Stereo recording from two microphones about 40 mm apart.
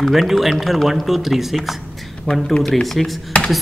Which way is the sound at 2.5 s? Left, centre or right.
Centre.